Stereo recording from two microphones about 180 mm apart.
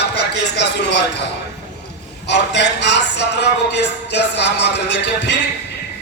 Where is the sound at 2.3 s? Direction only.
75° left (ahead or behind).